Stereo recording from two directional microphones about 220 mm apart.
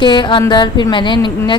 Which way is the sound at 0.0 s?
20° left (ahead or behind).